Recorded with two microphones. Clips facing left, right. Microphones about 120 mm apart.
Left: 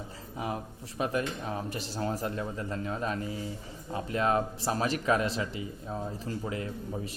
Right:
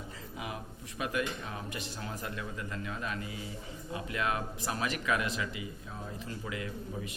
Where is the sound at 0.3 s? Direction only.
35° left (ahead or behind).